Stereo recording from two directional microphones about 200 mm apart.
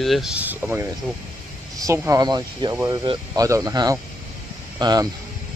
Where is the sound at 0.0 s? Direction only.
Centre (ahead or behind); by 5.0 s 20° right (ahead or behind).